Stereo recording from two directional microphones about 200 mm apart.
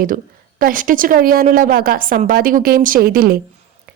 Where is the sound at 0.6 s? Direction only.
45° right (ahead or behind).